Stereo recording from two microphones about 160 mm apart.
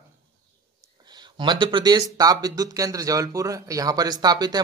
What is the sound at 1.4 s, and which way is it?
Speech, 30° right (ahead or behind).